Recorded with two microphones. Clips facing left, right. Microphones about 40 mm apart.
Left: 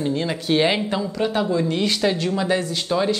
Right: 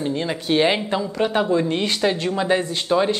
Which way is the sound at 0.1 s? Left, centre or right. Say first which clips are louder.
Even; centre.